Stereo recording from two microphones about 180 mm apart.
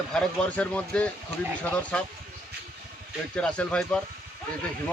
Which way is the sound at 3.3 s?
5° left (ahead or behind).